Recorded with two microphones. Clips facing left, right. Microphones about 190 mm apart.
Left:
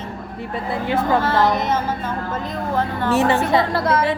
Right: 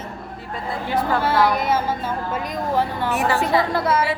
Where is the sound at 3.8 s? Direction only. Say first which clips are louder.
Left 2 dB; 5° right (ahead or behind).